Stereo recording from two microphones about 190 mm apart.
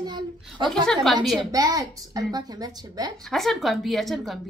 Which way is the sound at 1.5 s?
20° right (ahead or behind).